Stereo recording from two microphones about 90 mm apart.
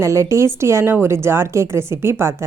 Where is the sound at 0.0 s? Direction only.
35° right (ahead or behind).